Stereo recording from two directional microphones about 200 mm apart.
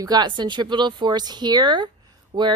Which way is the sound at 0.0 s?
20° right (ahead or behind).